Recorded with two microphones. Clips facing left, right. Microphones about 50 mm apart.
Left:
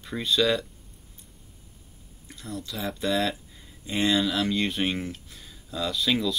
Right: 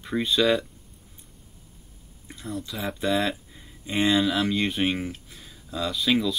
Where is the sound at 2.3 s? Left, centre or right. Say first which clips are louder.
Right 2 dB; centre.